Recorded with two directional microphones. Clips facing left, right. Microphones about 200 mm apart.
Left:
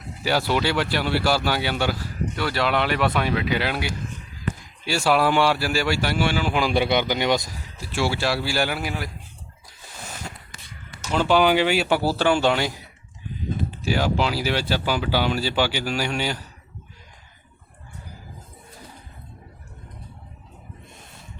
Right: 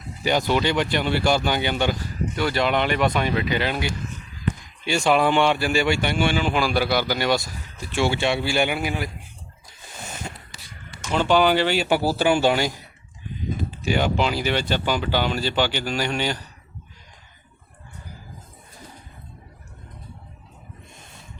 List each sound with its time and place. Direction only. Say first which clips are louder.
0.2 s speech: right 1 dB; 5° left (ahead or behind)
6.6 s speech: left 4 dB; 25° left (ahead or behind)
7.8 s speech: right 2 dB; 5° left (ahead or behind)
10.0 s a sound: right 2 dB; centre (ahead or behind)
11.2 s speech: even; 10° left (ahead or behind)
11.9 s speech: right 1 dB; 10° right (ahead or behind)
13.8 s speech: right 1 dB; 5° left (ahead or behind)